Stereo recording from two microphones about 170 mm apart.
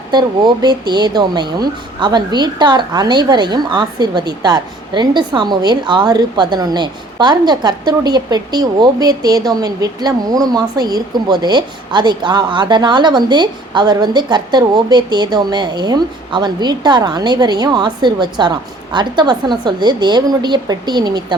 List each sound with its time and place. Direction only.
0.1 s a woman's voice: 25° right (ahead or behind)